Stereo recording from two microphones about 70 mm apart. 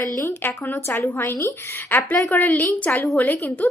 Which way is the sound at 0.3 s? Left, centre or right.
Left.